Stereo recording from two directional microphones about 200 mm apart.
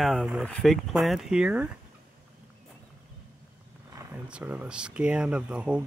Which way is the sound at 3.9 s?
10° right (ahead or behind).